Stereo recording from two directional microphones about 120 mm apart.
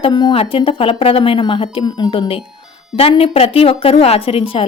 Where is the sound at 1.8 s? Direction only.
35° left (ahead or behind).